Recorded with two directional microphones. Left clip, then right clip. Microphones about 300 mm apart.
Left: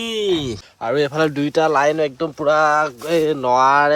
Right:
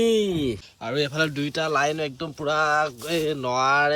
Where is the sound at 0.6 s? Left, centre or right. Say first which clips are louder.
Left 7 dB; centre.